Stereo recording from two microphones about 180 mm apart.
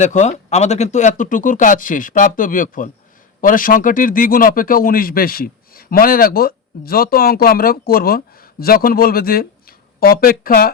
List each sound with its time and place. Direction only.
0.0 s speech: 40° left (ahead or behind)